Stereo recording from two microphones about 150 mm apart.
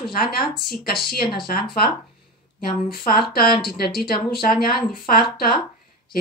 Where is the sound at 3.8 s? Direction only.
90° left.